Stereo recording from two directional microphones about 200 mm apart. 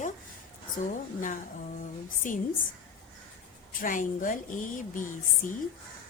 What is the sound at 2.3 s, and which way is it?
Speech, 40° left (ahead or behind).